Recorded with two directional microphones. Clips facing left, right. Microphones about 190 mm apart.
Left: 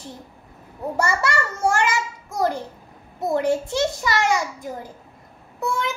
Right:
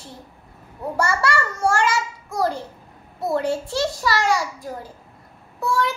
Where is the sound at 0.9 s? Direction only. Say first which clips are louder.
Right 1 dB; 20° left (ahead or behind).